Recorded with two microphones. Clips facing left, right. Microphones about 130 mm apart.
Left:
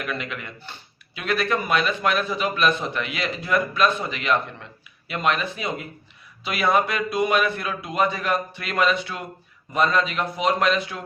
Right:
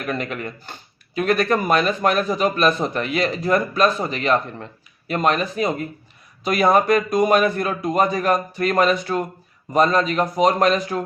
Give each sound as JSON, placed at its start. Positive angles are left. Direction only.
{"t": 0.0, "sound": "speech", "side_deg": -40}